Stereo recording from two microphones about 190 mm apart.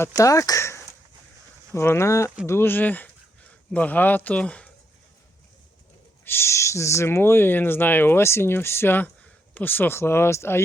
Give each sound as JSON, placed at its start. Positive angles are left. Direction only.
{"t": 0.2, "sound": "speech", "side_deg": 15}
{"t": 6.2, "sound": "speech", "side_deg": 10}